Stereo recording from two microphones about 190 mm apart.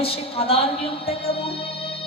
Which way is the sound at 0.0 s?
30° left (ahead or behind).